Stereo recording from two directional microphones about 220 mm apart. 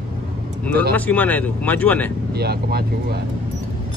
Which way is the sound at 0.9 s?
5° left (ahead or behind).